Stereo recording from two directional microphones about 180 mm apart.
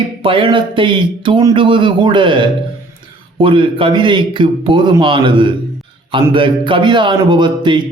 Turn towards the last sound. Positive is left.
turn(degrees=-25)  # may be behind; listen again after turning